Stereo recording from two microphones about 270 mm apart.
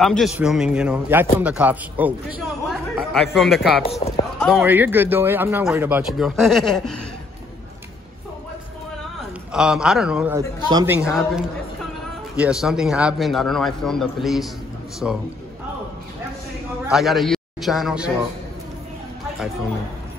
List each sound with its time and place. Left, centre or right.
0.0 s a man's voice: centre
4.0 s clip-clop: left
4.4 s a man's voice: centre
9.5 s a man's voice: centre
11.0 s a man's voice: centre
16.8 s a man's voice: centre